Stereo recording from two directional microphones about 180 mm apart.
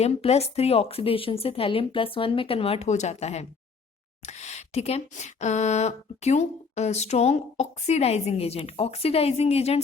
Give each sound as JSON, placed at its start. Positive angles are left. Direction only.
{"t": 0.0, "sound": "speech", "side_deg": 35}